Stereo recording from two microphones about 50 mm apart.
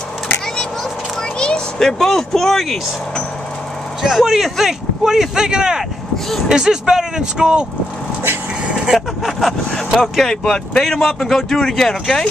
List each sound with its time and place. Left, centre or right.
1.4 s a sound: centre
1.9 s speech: centre
4.0 s speech: centre
8.9 s vehicle: centre
9.9 s speech: centre
10.3 s speech: centre